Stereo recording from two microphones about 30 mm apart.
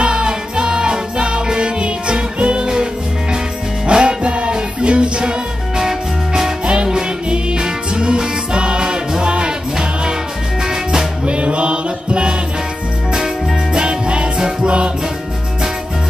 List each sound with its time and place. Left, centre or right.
0.0 s music: right
5.8 s music: centre
6.6 s music: right
10.6 s music: right
11.2 s mantra: right
13.7 s music: right